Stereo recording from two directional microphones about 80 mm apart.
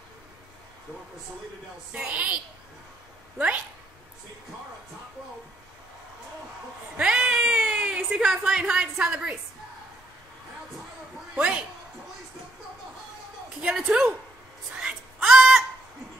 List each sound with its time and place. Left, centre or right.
1.9 s a woman's voice: centre
3.3 s speech: centre
7.0 s cat: centre
7.5 s a sound: centre
8.3 s a woman's voice: centre
11.3 s a woman's voice: centre
13.6 s a woman's voice: centre
14.8 s a sound: centre